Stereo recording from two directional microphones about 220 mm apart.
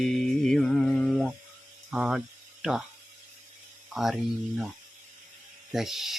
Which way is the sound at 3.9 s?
Centre (ahead or behind).